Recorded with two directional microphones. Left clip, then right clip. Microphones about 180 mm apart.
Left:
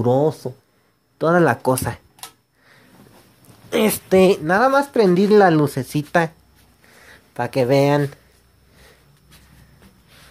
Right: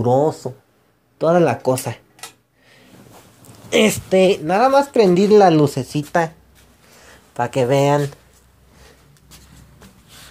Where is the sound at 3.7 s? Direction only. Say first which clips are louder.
Right 4 dB; 5° left (ahead or behind).